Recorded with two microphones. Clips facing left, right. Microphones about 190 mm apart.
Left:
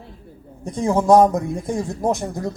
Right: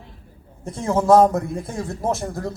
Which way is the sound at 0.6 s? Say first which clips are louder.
Left 2 dB; 15° left (ahead or behind).